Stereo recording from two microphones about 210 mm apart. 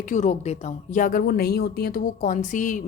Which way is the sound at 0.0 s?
35° left (ahead or behind).